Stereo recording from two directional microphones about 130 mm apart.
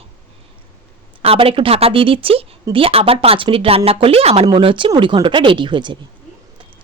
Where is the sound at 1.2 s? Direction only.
45° right (ahead or behind).